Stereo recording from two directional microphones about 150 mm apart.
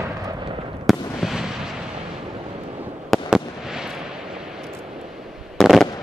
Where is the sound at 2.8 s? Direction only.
5° right (ahead or behind).